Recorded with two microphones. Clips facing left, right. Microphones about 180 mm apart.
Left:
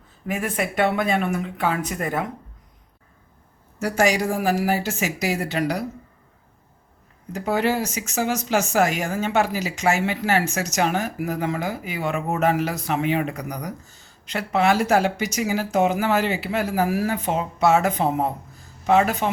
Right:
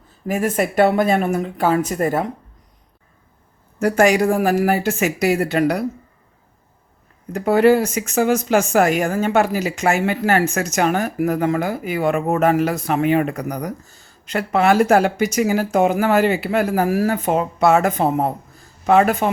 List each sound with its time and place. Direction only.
0.3 s speech: 45° right (ahead or behind)
3.8 s speech: 55° right (ahead or behind)
7.3 s speech: 55° right (ahead or behind)